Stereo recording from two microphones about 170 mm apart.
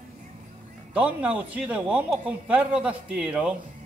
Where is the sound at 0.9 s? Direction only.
5° right (ahead or behind).